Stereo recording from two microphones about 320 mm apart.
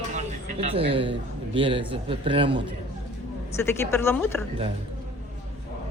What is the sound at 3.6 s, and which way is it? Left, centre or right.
Speech, centre.